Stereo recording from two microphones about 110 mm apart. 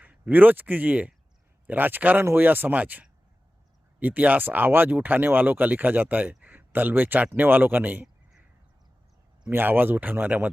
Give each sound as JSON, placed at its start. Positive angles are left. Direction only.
{"t": 0.0, "sound": "speech", "side_deg": -15}
{"t": 9.5, "sound": "speech", "side_deg": -20}